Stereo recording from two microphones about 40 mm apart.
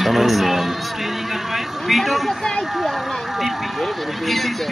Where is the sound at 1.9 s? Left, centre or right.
Centre.